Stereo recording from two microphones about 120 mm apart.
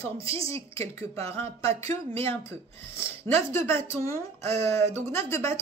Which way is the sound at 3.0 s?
20° left (ahead or behind).